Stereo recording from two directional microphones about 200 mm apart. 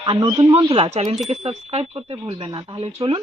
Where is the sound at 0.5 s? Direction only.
30° right (ahead or behind).